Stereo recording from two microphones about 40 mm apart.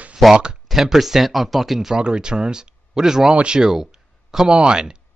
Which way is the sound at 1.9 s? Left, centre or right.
Right.